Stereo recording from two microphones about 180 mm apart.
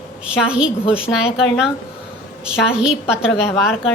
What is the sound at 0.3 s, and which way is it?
A woman's voice, 5° right (ahead or behind).